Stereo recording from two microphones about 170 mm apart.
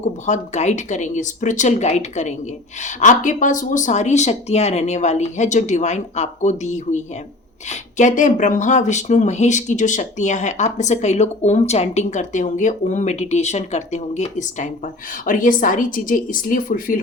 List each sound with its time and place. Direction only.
0.0 s speech: 45° left (ahead or behind)